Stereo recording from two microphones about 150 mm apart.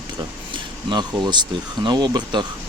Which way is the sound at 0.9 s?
30° right (ahead or behind).